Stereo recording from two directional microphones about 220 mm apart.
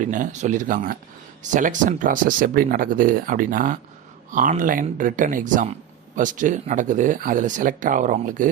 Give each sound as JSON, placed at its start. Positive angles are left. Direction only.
{"t": 0.0, "sound": "speech", "side_deg": -35}